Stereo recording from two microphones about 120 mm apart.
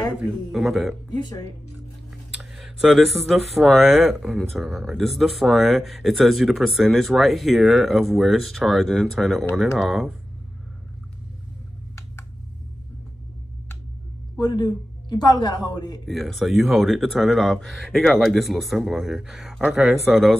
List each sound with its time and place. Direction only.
0.2 s speech: 5° right (ahead or behind)
2.3 s speech: 5° right (ahead or behind)
14.4 s a man's voice: 35° left (ahead or behind)
16.1 s speech: centre (ahead or behind)